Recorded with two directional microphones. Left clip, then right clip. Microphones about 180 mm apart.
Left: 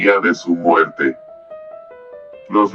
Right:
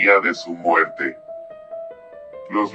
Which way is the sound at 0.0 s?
30° right (ahead or behind).